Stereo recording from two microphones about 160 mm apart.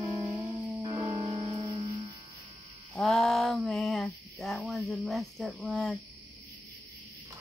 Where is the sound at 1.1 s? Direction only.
40° right (ahead or behind).